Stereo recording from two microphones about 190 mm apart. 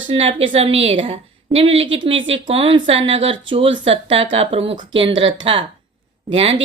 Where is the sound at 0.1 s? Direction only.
30° right (ahead or behind).